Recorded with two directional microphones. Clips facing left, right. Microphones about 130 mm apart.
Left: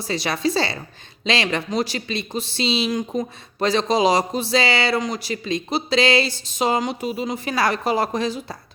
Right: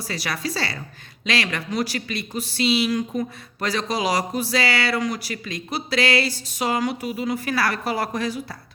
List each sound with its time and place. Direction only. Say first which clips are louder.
0.0 s speech: left 6 dB; 25° left (ahead or behind)